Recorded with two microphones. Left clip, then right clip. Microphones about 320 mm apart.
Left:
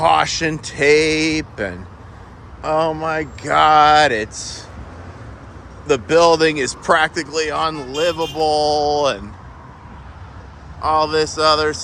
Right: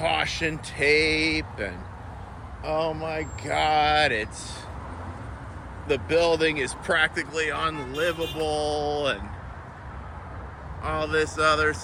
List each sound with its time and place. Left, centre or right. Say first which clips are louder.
0.0 s speech: left 10 dB; left
6.1 s speech: left 9 dB; left
10.8 s speech: left 9 dB; centre